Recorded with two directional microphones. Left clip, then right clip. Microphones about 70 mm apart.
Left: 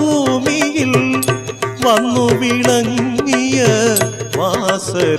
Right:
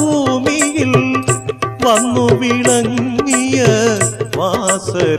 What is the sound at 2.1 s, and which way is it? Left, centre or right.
Music, right.